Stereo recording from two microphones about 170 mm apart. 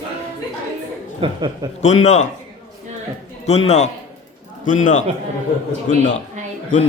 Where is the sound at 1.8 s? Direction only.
45° left (ahead or behind).